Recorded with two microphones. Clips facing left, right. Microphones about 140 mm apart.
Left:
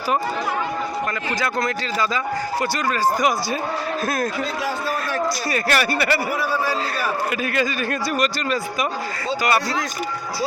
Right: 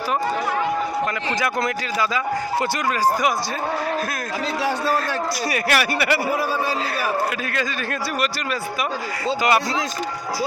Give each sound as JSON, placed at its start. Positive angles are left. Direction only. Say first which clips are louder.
{"t": 1.4, "sound": "speech", "louder": "even", "side_deg": -20}
{"t": 5.5, "sound": "a man's voice", "louder": "right 2 dB", "side_deg": -10}
{"t": 7.5, "sound": "speech", "louder": "left 3 dB", "side_deg": 5}